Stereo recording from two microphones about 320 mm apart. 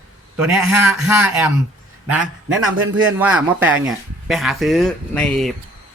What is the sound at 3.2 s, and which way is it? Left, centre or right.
Speech, centre.